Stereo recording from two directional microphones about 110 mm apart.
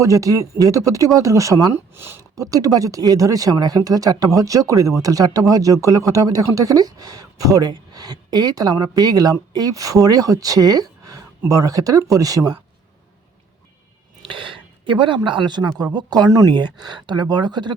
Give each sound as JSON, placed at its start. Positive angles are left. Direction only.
{"t": 0.0, "sound": "speech", "side_deg": -30}
{"t": 2.3, "sound": "speech", "side_deg": -35}
{"t": 14.2, "sound": "speech", "side_deg": -50}